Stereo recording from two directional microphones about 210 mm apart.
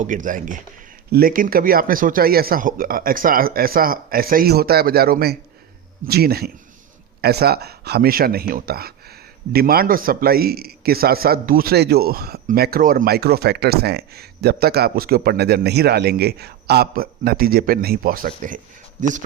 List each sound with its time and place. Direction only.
0.0 s speech: 40° right (ahead or behind)